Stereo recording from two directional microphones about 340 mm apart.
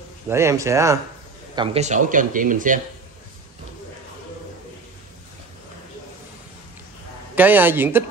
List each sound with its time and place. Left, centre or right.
0.3 s speech: centre; by 2.8 s right
7.3 s a man's voice: centre